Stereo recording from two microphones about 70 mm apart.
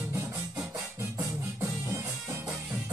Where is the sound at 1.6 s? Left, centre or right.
Right.